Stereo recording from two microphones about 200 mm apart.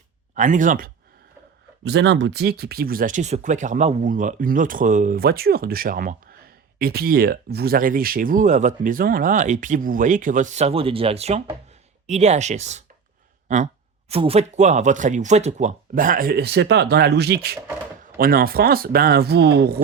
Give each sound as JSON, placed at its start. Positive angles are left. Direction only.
{"t": 0.3, "sound": "speech", "side_deg": -40}
{"t": 1.8, "sound": "speech", "side_deg": -60}
{"t": 14.1, "sound": "speech", "side_deg": -30}